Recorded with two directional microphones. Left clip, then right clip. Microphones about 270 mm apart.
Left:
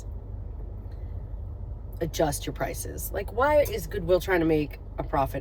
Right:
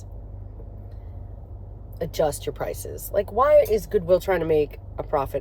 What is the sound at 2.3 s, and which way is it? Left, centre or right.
Speech, centre.